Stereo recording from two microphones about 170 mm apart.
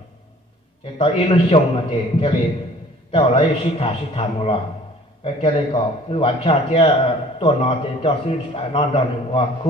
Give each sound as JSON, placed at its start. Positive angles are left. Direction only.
{"t": 0.9, "sound": "a man's voice", "side_deg": 30}